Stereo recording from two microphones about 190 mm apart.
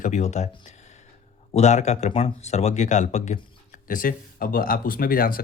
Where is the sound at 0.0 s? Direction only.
40° left (ahead or behind).